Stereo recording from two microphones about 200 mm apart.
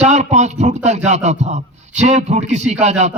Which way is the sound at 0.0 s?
35° right (ahead or behind).